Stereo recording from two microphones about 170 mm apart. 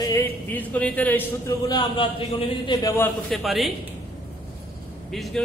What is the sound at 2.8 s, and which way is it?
Speech, 20° left (ahead or behind).